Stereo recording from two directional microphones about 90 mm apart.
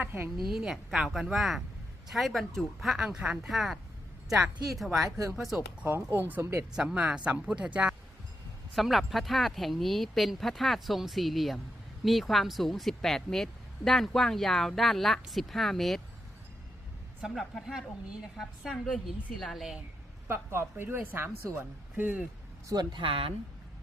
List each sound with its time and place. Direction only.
0.0 s a woman's voice: 25° right (ahead or behind)
0.4 s speech: 5° right (ahead or behind)
3.5 s speech: centre (ahead or behind)
5.0 s speech: 40° right (ahead or behind)
5.4 s speech: 5° right (ahead or behind)
6.1 s a woman's voice: 20° right (ahead or behind)
6.4 s speech: 30° right (ahead or behind)
6.7 s speech: 10° right (ahead or behind)
8.7 s speech: centre (ahead or behind)
17.2 s speech: 5° right (ahead or behind)
20.2 s a woman's voice: 25° right (ahead or behind)
22.7 s speech: 55° right (ahead or behind); by 23.3 s 80° right